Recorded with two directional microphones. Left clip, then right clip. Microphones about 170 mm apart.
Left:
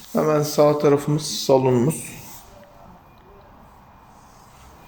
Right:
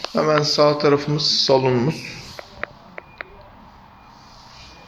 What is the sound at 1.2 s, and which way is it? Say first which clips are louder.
Speech: right 10 dB; 50° left (ahead or behind).